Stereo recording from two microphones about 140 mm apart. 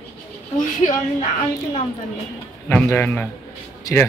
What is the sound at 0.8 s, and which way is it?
Speech, 60° left (ahead or behind).